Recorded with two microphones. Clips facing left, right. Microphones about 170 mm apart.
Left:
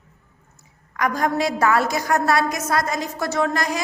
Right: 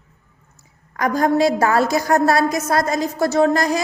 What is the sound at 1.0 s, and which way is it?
A woman's voice, 35° right (ahead or behind).